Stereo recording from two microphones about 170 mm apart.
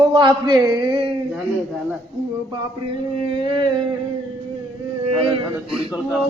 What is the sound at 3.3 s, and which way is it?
Speech, 30° right (ahead or behind).